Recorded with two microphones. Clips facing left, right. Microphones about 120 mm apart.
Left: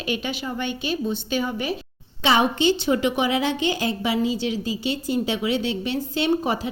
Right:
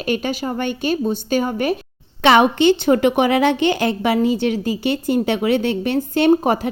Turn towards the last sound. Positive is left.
turn(degrees=-50)  # may be behind; listen again after turning